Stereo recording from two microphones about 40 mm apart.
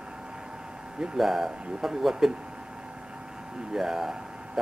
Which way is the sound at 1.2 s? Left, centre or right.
Centre.